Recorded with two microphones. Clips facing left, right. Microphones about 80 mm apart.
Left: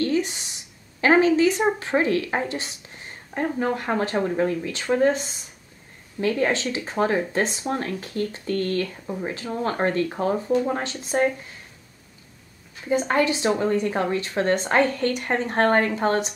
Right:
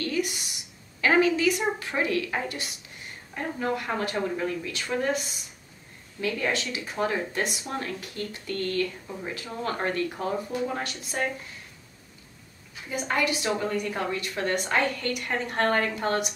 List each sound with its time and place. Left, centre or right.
0.0 s a sound: left
1.0 s a woman's voice: left
12.9 s a woman's voice: left